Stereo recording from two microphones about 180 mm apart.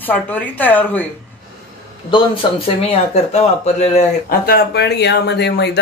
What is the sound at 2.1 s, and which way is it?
Speech, 30° left (ahead or behind).